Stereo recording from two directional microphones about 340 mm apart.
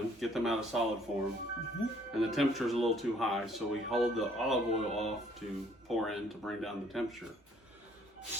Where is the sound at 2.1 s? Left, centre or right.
Centre.